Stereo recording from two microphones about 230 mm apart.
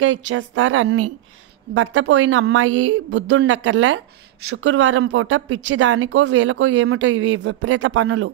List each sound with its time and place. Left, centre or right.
0.0 s speech: right
1.7 s speech: right